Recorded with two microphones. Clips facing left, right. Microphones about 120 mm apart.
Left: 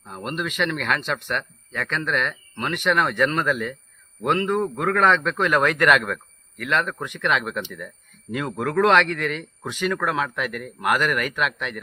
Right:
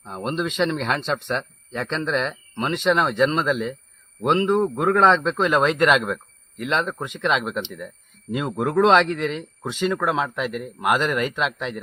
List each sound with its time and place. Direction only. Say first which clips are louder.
0.0 s speech: right 3 dB; 25° right (ahead or behind)